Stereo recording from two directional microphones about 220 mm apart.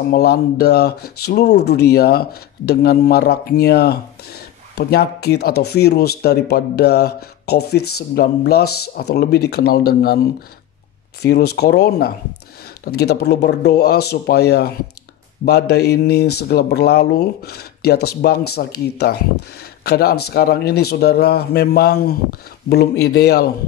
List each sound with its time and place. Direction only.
0.1 s speech: 45° left (ahead or behind)
11.2 s speech: 45° left (ahead or behind)